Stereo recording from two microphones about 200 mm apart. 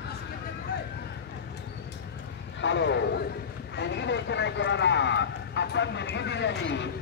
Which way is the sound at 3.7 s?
60° left (ahead or behind).